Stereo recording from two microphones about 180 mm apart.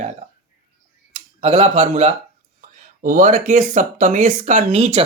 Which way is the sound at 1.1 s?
35° right (ahead or behind).